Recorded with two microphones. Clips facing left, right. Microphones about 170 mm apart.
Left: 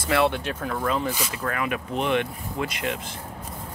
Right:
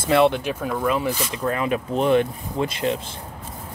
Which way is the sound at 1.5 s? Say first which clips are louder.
Right 6 dB; 25° right (ahead or behind).